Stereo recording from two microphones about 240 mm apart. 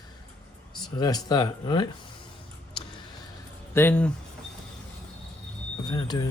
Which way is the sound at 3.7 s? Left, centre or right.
Centre.